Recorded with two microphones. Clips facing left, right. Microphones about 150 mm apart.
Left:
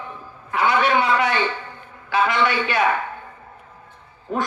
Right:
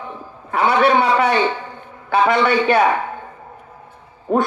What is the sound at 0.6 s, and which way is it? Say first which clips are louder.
Speech: right 4 dB; 35° right (ahead or behind).